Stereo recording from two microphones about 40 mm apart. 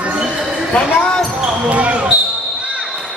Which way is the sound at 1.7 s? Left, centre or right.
Right.